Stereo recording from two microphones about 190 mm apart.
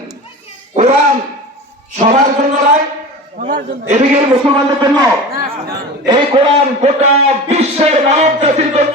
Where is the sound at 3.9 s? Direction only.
40° right (ahead or behind).